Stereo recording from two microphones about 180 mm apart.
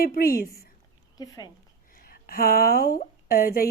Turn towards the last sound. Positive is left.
turn(degrees=55)  # may be behind; listen again after turning